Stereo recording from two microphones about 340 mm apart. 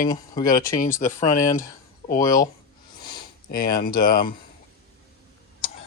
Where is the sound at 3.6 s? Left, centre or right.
Centre.